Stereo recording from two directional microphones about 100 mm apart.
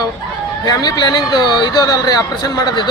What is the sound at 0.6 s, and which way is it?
Speech, 40° left (ahead or behind).